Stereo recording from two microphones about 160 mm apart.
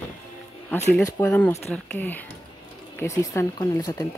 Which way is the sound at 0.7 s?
10° left (ahead or behind).